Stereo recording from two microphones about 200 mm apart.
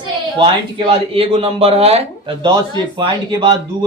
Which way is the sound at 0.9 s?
30° right (ahead or behind).